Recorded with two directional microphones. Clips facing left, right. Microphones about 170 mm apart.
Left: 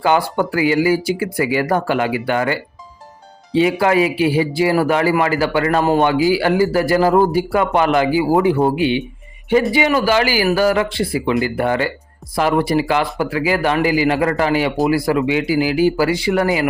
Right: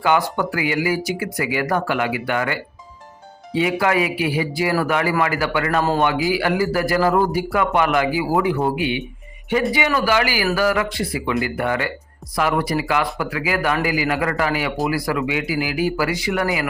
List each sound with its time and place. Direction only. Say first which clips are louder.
0.0 s speech: left 3 dB; 30° left (ahead or behind)